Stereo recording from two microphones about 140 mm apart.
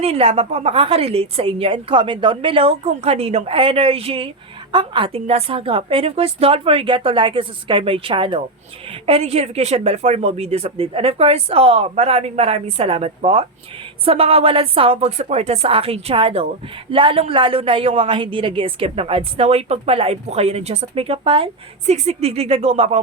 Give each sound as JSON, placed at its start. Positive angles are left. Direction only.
{"t": 0.0, "sound": "a woman's voice", "side_deg": -45}